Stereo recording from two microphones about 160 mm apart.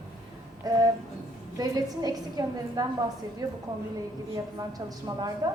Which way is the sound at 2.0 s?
25° right (ahead or behind).